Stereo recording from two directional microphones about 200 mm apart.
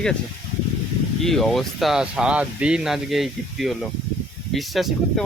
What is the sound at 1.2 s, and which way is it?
Speech, centre (ahead or behind).